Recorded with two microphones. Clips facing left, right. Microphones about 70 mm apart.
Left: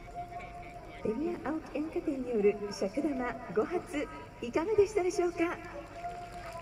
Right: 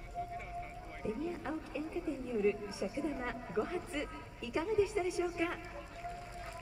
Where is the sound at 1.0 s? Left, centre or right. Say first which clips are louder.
Left 5 dB; centre.